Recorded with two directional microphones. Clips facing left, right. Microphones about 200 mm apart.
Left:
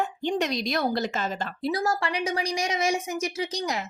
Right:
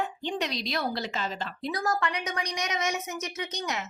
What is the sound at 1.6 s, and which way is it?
A woman's voice, 25° left (ahead or behind).